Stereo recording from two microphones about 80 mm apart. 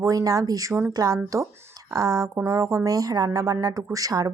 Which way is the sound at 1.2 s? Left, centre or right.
Right.